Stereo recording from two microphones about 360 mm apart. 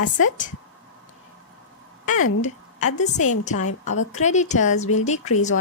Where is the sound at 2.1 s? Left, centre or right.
Left.